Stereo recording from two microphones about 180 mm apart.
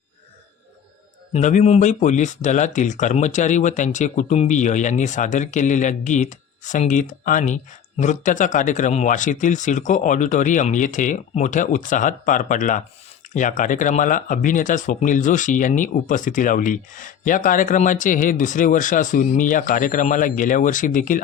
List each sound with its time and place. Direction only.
1.3 s speech: 40° left (ahead or behind)